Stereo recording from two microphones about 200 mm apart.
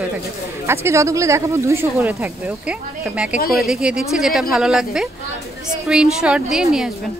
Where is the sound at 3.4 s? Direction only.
50° left (ahead or behind).